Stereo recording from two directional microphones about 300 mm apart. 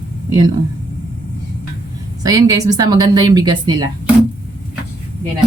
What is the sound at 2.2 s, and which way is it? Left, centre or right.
A woman's voice, centre.